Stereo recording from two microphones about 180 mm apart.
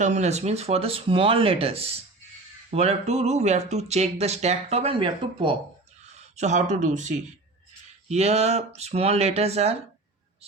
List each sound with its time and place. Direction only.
0.0 s speech: 40° right (ahead or behind)
6.3 s speech: 40° right (ahead or behind)